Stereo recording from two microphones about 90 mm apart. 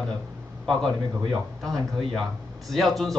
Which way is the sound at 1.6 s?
5° left (ahead or behind).